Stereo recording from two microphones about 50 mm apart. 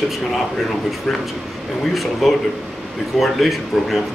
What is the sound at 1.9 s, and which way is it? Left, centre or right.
Speech, centre.